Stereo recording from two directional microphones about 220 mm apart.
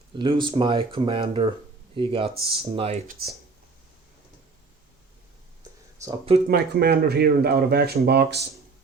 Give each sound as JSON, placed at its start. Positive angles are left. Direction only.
{"t": 0.2, "sound": "speech", "side_deg": -20}
{"t": 6.0, "sound": "speech", "side_deg": -15}
{"t": 6.5, "sound": "speech", "side_deg": -45}